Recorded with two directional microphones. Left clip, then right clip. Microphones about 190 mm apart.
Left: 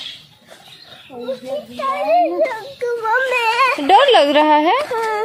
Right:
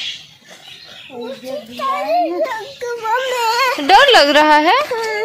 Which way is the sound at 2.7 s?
25° left (ahead or behind).